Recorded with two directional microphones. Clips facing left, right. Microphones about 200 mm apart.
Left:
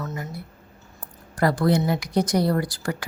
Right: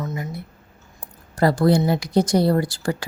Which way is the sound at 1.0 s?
25° right (ahead or behind).